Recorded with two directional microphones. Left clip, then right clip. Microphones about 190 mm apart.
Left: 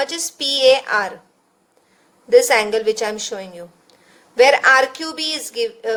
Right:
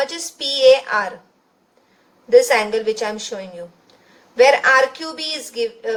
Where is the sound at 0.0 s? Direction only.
35° left (ahead or behind).